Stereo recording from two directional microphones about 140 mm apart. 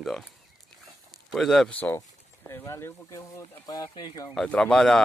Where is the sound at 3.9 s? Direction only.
40° left (ahead or behind).